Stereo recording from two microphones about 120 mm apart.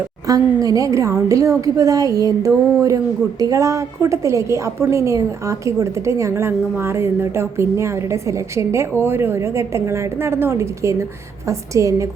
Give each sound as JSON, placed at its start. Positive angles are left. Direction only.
{"t": 0.3, "sound": "a woman's voice", "side_deg": -30}